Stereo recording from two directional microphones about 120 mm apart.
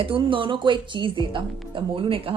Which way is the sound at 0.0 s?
45° right (ahead or behind).